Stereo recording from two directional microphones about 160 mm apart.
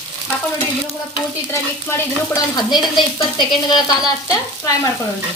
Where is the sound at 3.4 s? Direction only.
25° left (ahead or behind).